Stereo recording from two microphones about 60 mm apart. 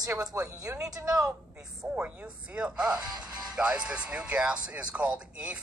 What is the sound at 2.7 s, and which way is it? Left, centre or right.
Speech, centre.